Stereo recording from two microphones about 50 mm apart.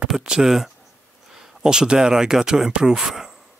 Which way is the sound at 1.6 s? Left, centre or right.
Centre.